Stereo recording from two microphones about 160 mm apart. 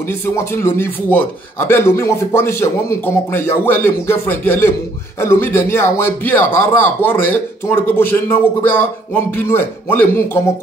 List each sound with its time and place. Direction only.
0.5 s speech: 15° left (ahead or behind)